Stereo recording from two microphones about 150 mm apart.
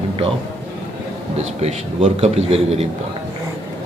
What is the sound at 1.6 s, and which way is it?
A man's voice, 45° right (ahead or behind).